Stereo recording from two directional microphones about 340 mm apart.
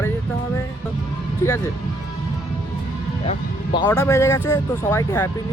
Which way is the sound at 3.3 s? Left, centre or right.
Centre.